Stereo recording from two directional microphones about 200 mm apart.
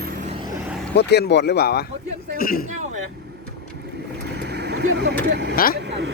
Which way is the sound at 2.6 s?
35° right (ahead or behind).